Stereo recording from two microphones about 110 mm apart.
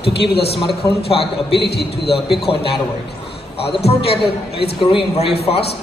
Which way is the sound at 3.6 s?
60° left (ahead or behind).